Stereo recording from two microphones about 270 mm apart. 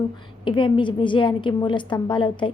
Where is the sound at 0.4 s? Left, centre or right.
Centre.